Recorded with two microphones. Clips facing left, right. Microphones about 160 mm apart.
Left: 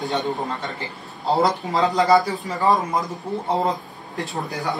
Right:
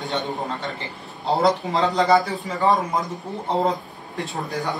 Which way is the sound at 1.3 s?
Centre (ahead or behind).